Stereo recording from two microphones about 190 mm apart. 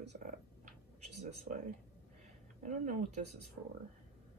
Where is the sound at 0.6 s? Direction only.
35° right (ahead or behind).